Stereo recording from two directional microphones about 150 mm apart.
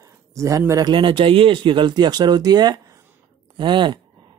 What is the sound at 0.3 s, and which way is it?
A man's voice, 20° right (ahead or behind).